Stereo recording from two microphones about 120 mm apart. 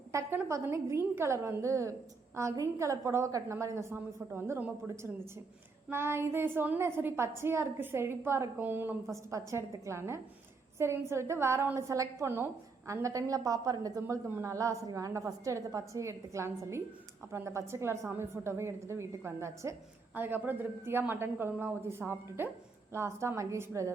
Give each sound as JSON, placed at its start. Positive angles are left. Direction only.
{"t": 0.1, "sound": "a woman's voice", "side_deg": -20}
{"t": 5.9, "sound": "a woman's voice", "side_deg": -20}